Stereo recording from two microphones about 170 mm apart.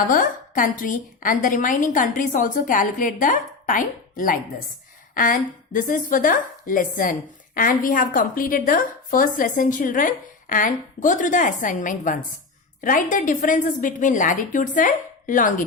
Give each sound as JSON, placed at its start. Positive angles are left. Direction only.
{"t": 0.1, "sound": "a woman's voice", "side_deg": 55}